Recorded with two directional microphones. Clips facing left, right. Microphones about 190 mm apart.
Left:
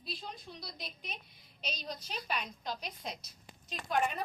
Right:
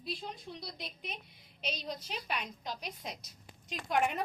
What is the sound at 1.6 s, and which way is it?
Speech, 20° right (ahead or behind).